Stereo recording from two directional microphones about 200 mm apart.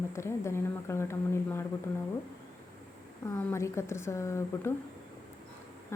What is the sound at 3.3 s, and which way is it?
A woman's voice, 10° left (ahead or behind).